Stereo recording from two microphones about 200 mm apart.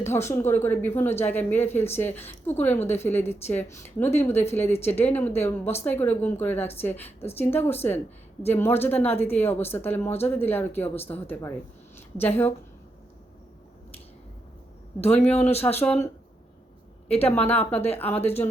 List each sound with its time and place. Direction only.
0.0 s a woman's voice: 10° left (ahead or behind)
11.9 s a sound: 10° left (ahead or behind)
15.0 s a woman's voice: 10° left (ahead or behind)
17.1 s a woman's voice: 10° left (ahead or behind)